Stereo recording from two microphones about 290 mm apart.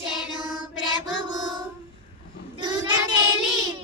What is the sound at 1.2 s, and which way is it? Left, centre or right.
Child singing, centre.